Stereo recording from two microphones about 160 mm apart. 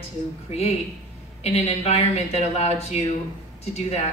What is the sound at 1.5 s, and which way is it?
Speech, 40° left (ahead or behind).